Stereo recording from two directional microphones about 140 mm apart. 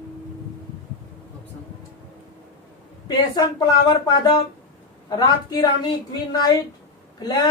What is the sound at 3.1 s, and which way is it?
A woman's voice, 30° left (ahead or behind).